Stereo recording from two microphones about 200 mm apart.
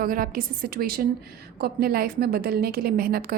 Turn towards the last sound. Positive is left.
turn(degrees=-45)  # may be behind; listen again after turning